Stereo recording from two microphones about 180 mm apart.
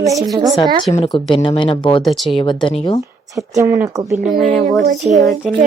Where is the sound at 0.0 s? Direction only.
20° right (ahead or behind).